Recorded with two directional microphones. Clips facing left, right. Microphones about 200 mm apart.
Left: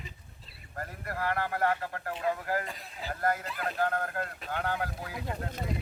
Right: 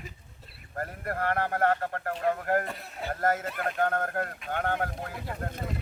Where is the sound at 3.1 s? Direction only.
45° right (ahead or behind).